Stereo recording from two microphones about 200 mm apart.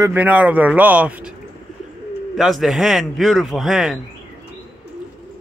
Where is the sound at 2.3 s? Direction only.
Centre (ahead or behind).